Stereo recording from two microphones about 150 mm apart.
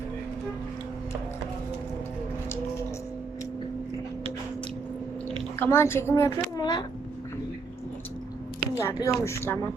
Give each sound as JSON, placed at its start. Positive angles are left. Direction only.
{"t": 5.5, "sound": "a woman's voice", "side_deg": 15}
{"t": 6.6, "sound": "a sound", "side_deg": 30}
{"t": 8.8, "sound": "a woman's voice", "side_deg": 20}